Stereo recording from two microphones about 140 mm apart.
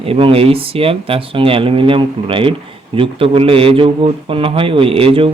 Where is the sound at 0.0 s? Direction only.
40° right (ahead or behind).